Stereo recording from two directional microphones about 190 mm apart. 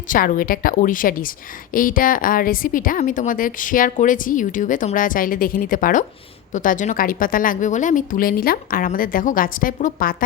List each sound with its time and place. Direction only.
0.1 s a woman's voice: 45° left (ahead or behind)